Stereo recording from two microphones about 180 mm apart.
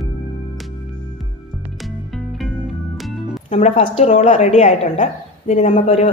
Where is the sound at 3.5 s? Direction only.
35° left (ahead or behind).